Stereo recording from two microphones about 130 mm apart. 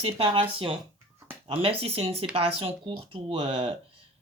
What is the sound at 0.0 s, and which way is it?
Speech, 45° right (ahead or behind).